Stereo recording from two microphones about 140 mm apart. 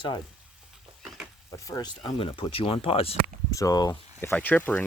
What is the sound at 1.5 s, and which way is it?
Speech, 25° left (ahead or behind).